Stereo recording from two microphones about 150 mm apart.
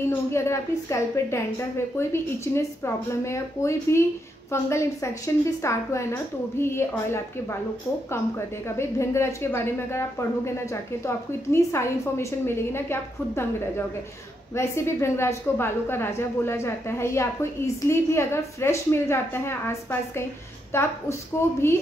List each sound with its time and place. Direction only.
0.3 s a woman's voice: 20° left (ahead or behind)
8.6 s a woman's voice: 20° left (ahead or behind)